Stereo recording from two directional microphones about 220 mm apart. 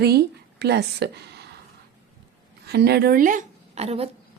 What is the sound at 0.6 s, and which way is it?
Speech, 50° right (ahead or behind).